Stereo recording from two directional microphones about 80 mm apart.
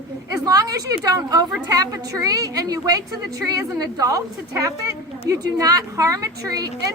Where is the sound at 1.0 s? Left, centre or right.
Right.